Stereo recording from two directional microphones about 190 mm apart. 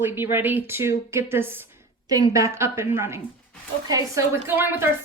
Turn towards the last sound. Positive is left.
turn(degrees=-10)  # may be behind; listen again after turning